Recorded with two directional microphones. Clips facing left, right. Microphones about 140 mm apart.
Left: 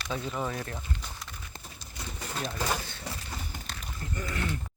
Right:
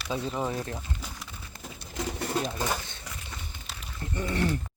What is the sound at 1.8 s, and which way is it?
Pigeon, 80° right.